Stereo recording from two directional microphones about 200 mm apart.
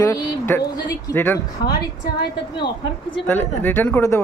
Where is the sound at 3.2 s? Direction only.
10° left (ahead or behind).